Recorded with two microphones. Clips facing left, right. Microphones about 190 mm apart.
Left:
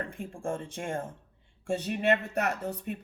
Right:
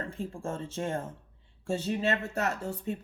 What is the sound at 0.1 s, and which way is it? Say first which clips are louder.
Speech: left 1 dB; 15° left (ahead or behind).